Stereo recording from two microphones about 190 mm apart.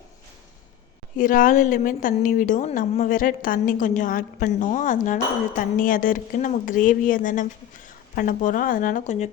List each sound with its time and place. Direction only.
1.1 s a woman's voice: 45° left (ahead or behind)